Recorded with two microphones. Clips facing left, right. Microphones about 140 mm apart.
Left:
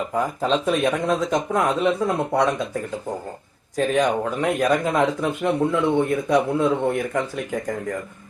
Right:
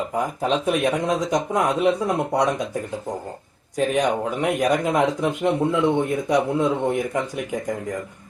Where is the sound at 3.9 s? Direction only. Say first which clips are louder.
Left 2 dB; 15° right (ahead or behind).